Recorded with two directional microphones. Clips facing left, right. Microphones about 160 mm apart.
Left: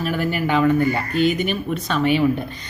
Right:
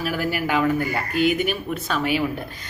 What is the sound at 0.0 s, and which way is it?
Speech, 5° right (ahead or behind).